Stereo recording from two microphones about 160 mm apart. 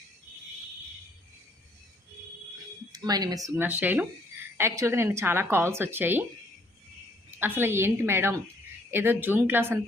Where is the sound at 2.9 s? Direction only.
25° right (ahead or behind).